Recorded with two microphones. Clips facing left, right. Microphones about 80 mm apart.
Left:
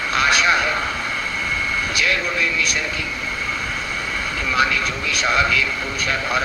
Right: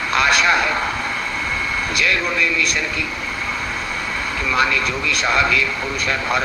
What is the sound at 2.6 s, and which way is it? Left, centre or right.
Speech, right.